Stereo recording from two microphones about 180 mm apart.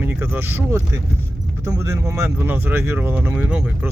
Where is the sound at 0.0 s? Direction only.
10° right (ahead or behind).